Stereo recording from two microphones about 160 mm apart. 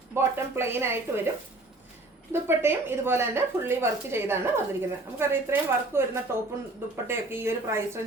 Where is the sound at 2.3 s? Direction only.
15° right (ahead or behind).